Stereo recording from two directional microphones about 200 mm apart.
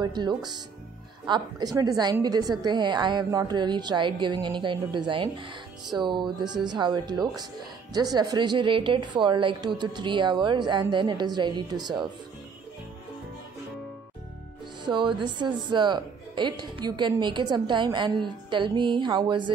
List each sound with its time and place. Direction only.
0.0 s a woman's voice: 20° right (ahead or behind)
14.9 s a woman's voice: 25° right (ahead or behind)